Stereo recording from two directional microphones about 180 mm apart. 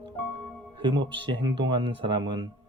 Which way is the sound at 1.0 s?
25° right (ahead or behind).